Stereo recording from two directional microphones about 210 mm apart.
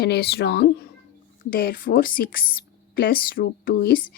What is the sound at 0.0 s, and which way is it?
Speech, 50° left (ahead or behind).